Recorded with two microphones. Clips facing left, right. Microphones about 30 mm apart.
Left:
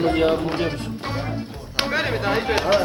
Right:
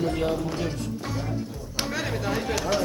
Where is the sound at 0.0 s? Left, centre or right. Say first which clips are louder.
Left 7 dB; left.